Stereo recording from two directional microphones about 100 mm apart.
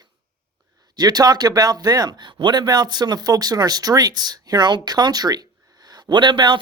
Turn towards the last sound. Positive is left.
turn(degrees=-50)  # may be behind; listen again after turning